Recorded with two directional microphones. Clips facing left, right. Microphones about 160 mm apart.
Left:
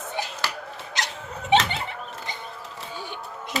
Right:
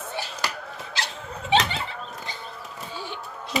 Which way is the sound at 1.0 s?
15° left (ahead or behind).